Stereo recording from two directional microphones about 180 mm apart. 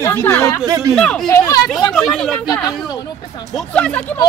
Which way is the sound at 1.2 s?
20° left (ahead or behind).